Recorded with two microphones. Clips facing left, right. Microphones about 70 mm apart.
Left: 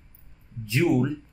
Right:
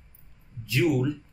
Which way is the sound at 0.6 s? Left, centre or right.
Left.